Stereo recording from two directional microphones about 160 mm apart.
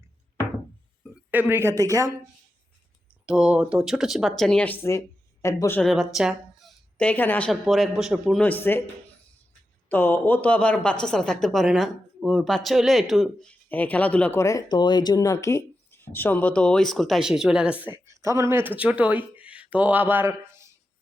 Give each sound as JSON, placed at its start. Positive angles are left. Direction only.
{"t": 1.3, "sound": "speech", "side_deg": -10}
{"t": 3.2, "sound": "speech", "side_deg": -5}
{"t": 5.8, "sound": "a woman's voice", "side_deg": 0}
{"t": 8.4, "sound": "speech", "side_deg": 10}
{"t": 9.9, "sound": "speech", "side_deg": 10}